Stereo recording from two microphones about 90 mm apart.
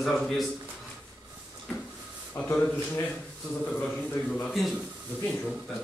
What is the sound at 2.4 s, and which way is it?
Speech, 30° left (ahead or behind).